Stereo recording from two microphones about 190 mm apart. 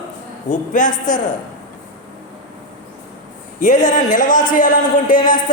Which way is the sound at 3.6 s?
40° left (ahead or behind).